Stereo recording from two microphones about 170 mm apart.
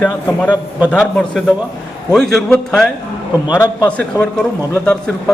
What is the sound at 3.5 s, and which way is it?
Speech, 20° left (ahead or behind).